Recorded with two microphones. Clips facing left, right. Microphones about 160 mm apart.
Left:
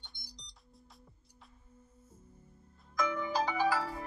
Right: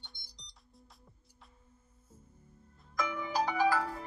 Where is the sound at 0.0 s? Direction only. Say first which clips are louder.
Left 2 dB; centre (ahead or behind).